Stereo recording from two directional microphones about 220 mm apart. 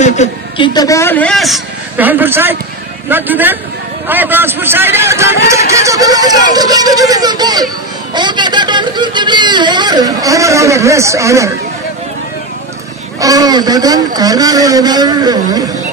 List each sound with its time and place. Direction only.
0.0 s a sound: 30° left (ahead or behind)
0.7 s a man's voice: 15° left (ahead or behind); by 11.5 s 15° right (ahead or behind)
13.2 s speech: 15° right (ahead or behind)